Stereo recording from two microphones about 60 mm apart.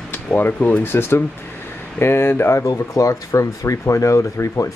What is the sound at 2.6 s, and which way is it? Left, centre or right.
Speech, left.